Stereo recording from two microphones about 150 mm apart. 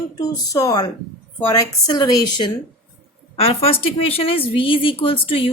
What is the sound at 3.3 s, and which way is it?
A woman's voice, 40° left (ahead or behind).